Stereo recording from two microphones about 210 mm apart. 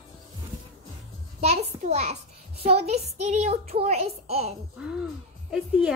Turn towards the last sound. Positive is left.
turn(degrees=0)  # may be behind; listen again after turning